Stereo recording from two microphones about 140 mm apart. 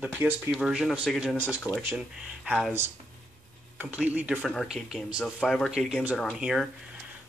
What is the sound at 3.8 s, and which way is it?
Speech, 10° right (ahead or behind).